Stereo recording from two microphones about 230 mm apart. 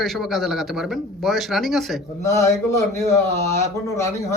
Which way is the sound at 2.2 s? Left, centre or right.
Centre.